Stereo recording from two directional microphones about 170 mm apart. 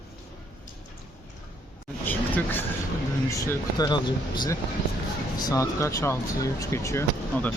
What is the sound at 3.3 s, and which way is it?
Speech, 20° left (ahead or behind).